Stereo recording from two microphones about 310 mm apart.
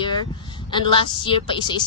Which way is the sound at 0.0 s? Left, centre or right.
Centre.